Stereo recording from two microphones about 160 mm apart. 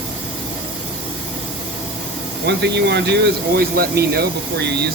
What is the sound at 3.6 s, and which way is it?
Speech, 75° right (ahead or behind).